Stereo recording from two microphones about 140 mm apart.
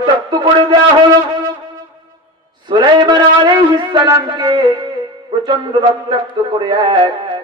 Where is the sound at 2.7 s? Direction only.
35° right (ahead or behind).